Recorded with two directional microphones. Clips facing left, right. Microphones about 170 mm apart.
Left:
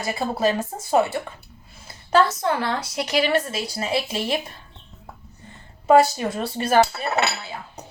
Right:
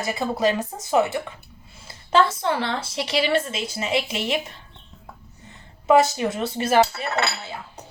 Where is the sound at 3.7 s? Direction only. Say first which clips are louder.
Even; 20° right (ahead or behind).